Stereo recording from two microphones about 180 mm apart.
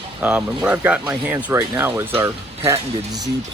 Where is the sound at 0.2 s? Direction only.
5° right (ahead or behind).